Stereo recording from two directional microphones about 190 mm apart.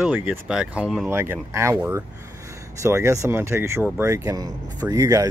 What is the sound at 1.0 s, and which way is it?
Speech, 10° right (ahead or behind).